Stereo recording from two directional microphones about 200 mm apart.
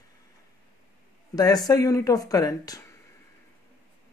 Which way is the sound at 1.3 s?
20° left (ahead or behind).